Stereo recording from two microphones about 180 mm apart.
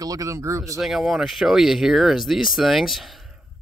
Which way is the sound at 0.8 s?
Centre (ahead or behind).